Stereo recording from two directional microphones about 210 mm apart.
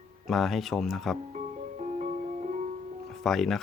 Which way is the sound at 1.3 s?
35° right (ahead or behind).